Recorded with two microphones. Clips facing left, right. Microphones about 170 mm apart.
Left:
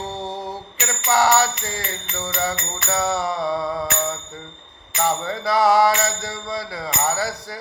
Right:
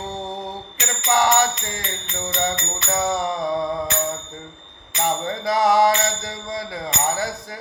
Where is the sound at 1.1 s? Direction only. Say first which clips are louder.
Even; 20° right (ahead or behind).